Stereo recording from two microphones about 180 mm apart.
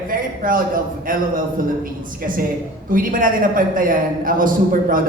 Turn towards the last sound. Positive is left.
turn(degrees=-50)  # may be behind; listen again after turning